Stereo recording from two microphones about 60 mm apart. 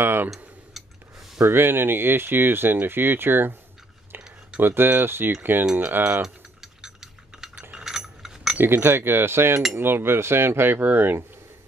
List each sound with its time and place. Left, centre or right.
0.0 s tick-tock: right
0.8 s a sound: centre
1.4 s speech: right
4.6 s speech: right
6.2 s mechanisms: centre
7.7 s a sound: centre
8.5 s speech: right